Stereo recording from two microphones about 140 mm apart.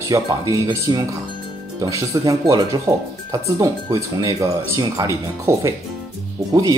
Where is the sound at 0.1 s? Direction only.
25° right (ahead or behind).